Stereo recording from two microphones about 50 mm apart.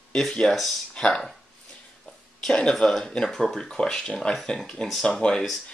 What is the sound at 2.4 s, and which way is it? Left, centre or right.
Speech, centre.